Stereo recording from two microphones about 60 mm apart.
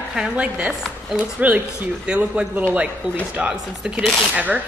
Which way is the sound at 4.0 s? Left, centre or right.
Centre.